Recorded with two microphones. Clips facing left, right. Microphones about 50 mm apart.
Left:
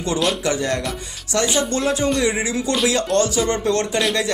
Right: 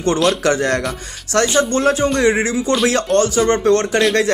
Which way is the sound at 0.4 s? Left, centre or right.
Right.